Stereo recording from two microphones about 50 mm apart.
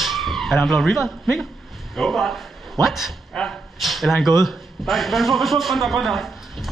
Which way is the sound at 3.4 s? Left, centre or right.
Centre.